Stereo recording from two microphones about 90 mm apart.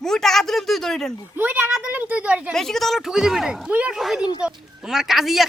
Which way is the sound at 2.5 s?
5° left (ahead or behind).